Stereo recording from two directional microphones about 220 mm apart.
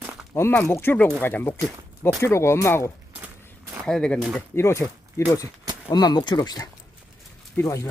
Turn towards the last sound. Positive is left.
turn(degrees=15)  # may be behind; listen again after turning